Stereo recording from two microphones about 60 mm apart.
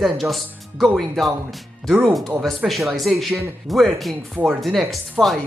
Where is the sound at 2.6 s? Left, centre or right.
Centre.